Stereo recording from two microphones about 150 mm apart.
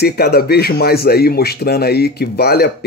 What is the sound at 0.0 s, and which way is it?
Speech, 90° left.